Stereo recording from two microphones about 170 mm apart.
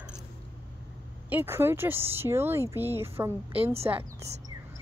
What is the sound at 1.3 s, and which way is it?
Speech, 15° right (ahead or behind).